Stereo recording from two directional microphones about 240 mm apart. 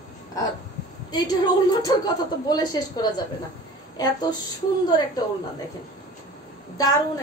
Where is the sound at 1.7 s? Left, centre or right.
Centre.